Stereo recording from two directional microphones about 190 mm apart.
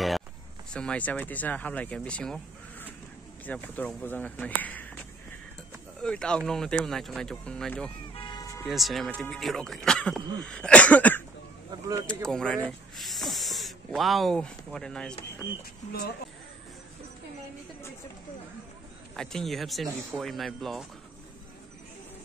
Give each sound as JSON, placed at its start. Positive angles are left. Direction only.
{"t": 0.7, "sound": "speech", "side_deg": 5}
{"t": 6.0, "sound": "speech", "side_deg": 5}
{"t": 8.1, "sound": "cat", "side_deg": 25}
{"t": 8.6, "sound": "speech", "side_deg": 0}
{"t": 15.9, "sound": "speech", "side_deg": 55}
{"t": 19.1, "sound": "speech", "side_deg": 0}